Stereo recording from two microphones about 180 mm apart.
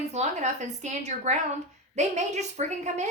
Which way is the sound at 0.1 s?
40° right (ahead or behind).